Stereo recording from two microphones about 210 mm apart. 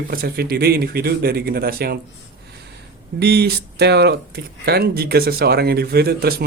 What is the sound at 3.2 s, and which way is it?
Speech, 50° right (ahead or behind).